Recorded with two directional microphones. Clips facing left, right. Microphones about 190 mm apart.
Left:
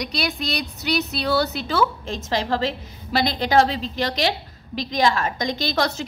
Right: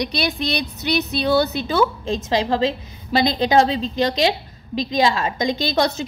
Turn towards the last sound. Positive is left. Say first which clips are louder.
# right 3 dB
turn(degrees=-20)  # may be behind; listen again after turning